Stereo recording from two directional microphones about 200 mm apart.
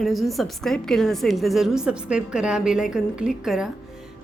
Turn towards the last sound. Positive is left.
turn(degrees=-5)  # may be behind; listen again after turning